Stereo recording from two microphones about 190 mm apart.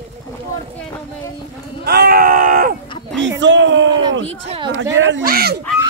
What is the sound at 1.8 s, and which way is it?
Speech, 55° right (ahead or behind).